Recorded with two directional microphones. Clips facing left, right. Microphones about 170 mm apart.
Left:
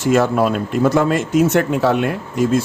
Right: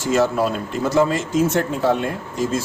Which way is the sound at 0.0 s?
55° left (ahead or behind).